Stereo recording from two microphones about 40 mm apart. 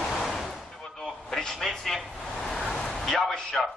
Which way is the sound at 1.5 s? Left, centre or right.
Centre.